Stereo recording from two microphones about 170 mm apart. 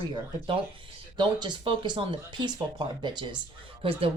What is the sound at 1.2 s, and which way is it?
Speech, 30° right (ahead or behind).